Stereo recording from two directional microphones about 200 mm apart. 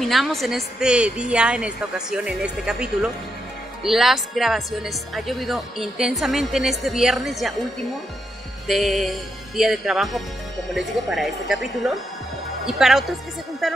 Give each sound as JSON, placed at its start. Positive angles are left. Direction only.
{"t": 0.0, "sound": "speech", "side_deg": 0}
{"t": 8.6, "sound": "speech", "side_deg": 0}